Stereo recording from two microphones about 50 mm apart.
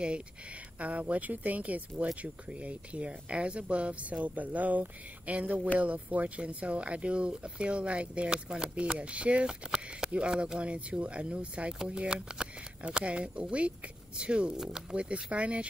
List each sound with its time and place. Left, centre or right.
0.7 s speech: right